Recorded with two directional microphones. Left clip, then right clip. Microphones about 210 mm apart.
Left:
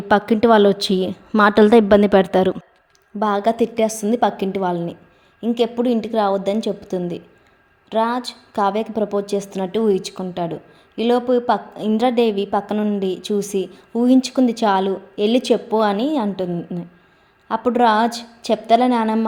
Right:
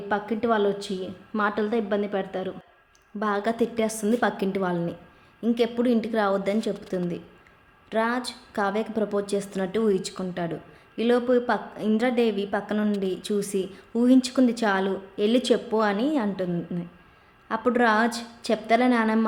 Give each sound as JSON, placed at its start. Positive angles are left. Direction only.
{"t": 0.1, "sound": "a woman's voice", "side_deg": 45}
{"t": 3.2, "sound": "a woman's voice", "side_deg": 20}